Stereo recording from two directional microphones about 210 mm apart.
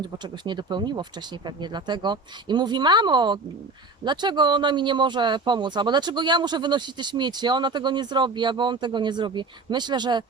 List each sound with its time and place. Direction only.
0.0 s speech: 20° right (ahead or behind)